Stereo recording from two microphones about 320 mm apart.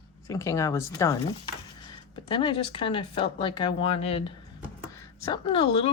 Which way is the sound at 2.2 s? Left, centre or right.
Centre.